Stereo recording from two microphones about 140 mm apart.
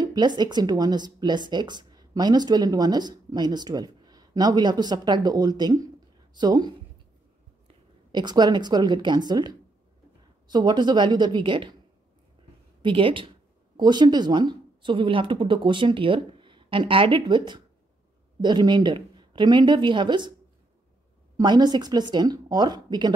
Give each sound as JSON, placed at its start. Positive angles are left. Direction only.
{"t": 0.0, "sound": "a woman's voice", "side_deg": -30}
{"t": 12.8, "sound": "speech", "side_deg": -40}
{"t": 21.4, "sound": "speech", "side_deg": -30}